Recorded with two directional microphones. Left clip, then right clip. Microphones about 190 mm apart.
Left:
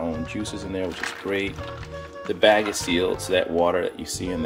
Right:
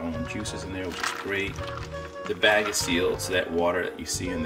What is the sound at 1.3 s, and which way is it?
Speech, 20° left (ahead or behind).